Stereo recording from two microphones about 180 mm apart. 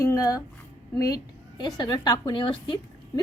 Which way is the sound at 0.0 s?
15° left (ahead or behind).